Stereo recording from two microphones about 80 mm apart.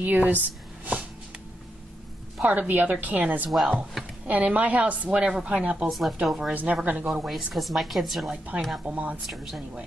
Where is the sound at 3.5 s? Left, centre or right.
Centre.